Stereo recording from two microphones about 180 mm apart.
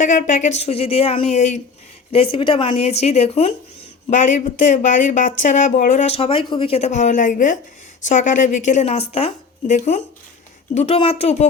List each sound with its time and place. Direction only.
0.0 s a woman's voice: 45° left (ahead or behind)